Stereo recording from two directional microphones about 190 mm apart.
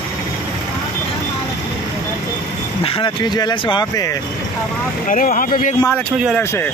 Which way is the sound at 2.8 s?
25° left (ahead or behind).